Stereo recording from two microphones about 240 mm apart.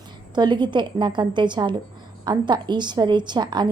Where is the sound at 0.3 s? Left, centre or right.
Centre.